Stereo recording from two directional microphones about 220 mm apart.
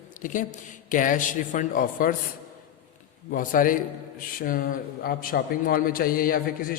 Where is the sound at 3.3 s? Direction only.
40° left (ahead or behind).